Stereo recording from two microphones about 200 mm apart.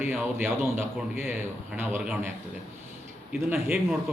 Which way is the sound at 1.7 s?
10° right (ahead or behind).